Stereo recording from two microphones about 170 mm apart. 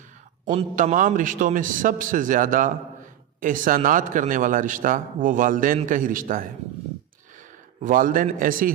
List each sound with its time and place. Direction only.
0.5 s a man's voice: 45° right (ahead or behind)
7.8 s a man's voice: 55° right (ahead or behind)